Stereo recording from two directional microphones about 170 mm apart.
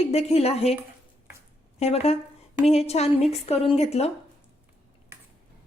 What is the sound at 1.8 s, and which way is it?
A woman's voice, 35° left (ahead or behind).